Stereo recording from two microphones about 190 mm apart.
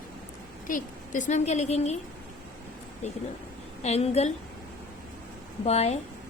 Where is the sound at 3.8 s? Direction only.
35° left (ahead or behind).